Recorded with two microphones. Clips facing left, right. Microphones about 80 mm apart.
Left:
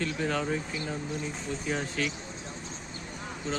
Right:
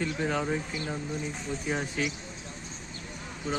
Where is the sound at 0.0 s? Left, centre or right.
Centre.